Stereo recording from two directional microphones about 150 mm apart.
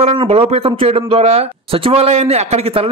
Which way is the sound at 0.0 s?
40° right (ahead or behind).